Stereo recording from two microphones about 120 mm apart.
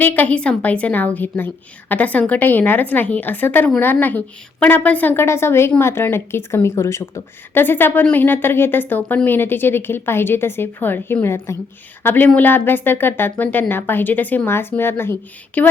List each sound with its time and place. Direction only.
0.0 s a woman's voice: 15° left (ahead or behind)